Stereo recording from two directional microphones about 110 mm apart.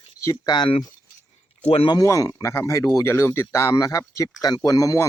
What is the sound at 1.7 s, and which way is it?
Speech, 60° left (ahead or behind).